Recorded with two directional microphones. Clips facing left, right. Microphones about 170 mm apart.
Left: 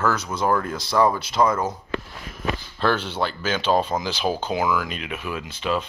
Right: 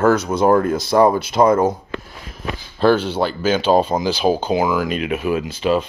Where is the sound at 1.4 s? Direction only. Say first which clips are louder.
Right 6 dB; 30° right (ahead or behind).